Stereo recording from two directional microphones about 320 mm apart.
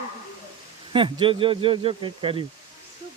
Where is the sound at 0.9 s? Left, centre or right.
Centre.